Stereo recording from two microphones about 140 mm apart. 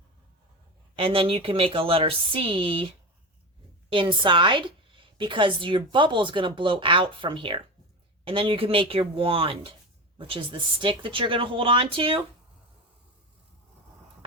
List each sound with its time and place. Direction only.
0.9 s a woman's voice: 40° right (ahead or behind)